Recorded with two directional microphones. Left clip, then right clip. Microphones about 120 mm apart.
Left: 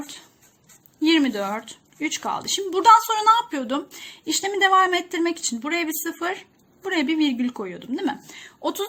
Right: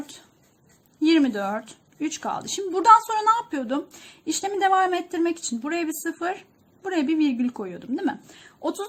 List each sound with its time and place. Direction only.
1.0 s a woman's voice: 70° right (ahead or behind); by 3.8 s 55° right (ahead or behind)
4.3 s a woman's voice: 70° right (ahead or behind)